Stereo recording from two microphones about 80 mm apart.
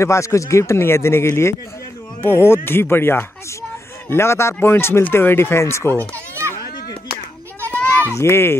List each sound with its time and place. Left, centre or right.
0.0 s speech: left
6.1 s children playing: right
7.7 s goat: left
8.1 s speech: left